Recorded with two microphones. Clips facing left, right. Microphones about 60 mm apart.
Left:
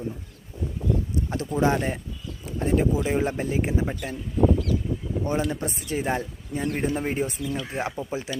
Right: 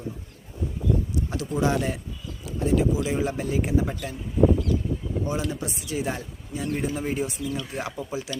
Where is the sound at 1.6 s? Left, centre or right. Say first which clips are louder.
Left 1 dB; left.